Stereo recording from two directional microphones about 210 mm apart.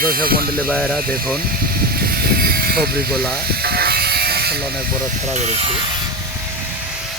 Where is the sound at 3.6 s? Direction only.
50° right (ahead or behind).